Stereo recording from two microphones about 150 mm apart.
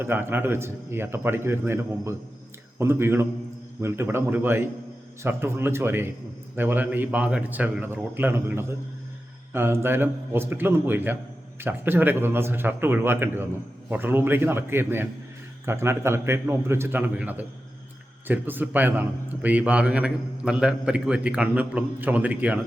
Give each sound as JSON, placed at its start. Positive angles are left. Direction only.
{"t": 0.0, "sound": "a man's voice", "side_deg": -15}